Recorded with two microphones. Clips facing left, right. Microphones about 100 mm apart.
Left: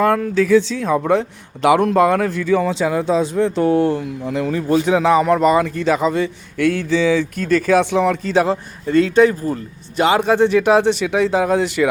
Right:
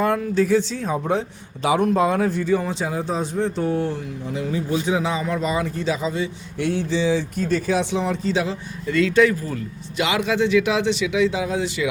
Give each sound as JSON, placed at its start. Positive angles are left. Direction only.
{"t": 0.0, "sound": "speech", "side_deg": 80}
{"t": 1.6, "sound": "speech", "side_deg": 80}